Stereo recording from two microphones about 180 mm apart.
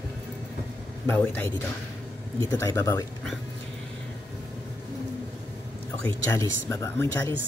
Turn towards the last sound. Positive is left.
turn(degrees=15)  # may be behind; listen again after turning